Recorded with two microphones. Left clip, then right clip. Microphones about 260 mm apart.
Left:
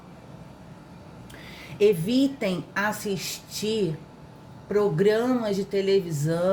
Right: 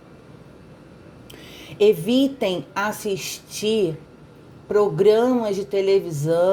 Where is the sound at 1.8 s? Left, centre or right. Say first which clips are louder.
Right 4 dB; right.